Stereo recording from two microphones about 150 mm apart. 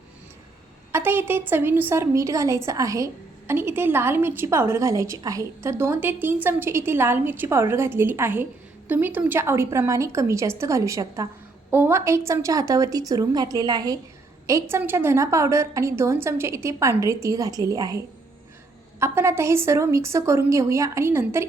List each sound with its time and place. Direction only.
0.9 s a woman's voice: 15° right (ahead or behind)